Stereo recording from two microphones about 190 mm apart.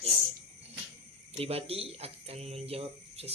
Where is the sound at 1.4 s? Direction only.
30° right (ahead or behind).